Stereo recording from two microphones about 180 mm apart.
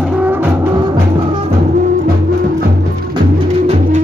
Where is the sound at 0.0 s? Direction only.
5° right (ahead or behind); by 1.5 s 25° right (ahead or behind).